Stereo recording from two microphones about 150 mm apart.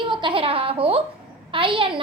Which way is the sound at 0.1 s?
35° right (ahead or behind).